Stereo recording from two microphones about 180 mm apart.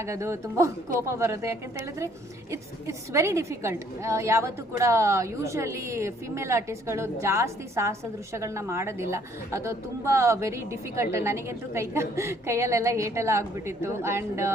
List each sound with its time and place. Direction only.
0.0 s a woman's voice: 15° right (ahead or behind)